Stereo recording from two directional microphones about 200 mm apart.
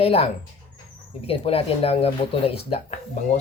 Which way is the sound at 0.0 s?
30° left (ahead or behind).